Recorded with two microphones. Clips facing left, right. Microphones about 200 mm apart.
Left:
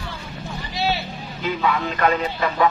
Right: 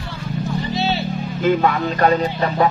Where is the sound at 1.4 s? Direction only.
50° right (ahead or behind).